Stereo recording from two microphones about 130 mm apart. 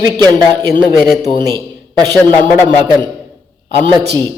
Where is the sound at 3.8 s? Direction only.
35° right (ahead or behind).